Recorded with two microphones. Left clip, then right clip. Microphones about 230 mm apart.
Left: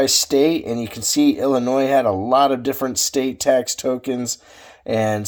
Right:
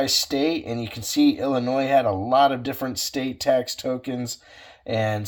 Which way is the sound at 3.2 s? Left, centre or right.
Left.